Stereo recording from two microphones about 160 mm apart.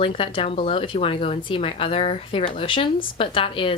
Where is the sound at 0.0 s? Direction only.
35° left (ahead or behind).